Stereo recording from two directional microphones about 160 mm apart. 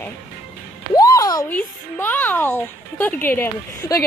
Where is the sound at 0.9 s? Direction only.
20° left (ahead or behind).